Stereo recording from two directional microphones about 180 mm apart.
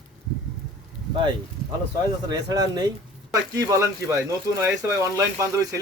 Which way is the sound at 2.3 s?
20° right (ahead or behind).